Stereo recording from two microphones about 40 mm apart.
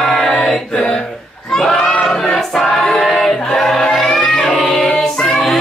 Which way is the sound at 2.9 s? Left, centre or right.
Centre.